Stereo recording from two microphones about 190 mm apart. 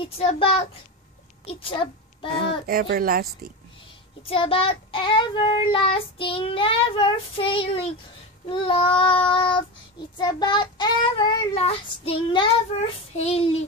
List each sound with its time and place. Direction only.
0.0 s a child's voice: 30° left (ahead or behind)
1.4 s child singing: 30° left (ahead or behind)
2.3 s speech: 55° right (ahead or behind)
4.3 s child singing: 30° left (ahead or behind)
12.7 s a child's voice: 30° left (ahead or behind)